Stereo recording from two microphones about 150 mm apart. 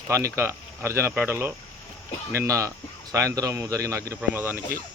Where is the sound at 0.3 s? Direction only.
15° right (ahead or behind).